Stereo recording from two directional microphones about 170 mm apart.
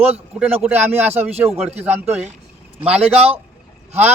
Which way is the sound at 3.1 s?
35° right (ahead or behind).